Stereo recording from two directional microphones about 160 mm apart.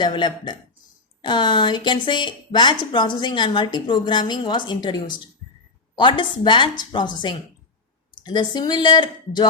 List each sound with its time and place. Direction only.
0.0 s speech: 30° left (ahead or behind)